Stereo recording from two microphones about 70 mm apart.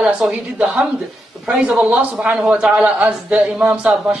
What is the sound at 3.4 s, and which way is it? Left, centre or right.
Speech, centre.